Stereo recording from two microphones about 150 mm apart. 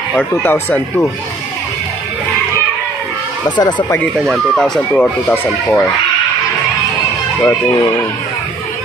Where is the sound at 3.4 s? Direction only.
30° left (ahead or behind).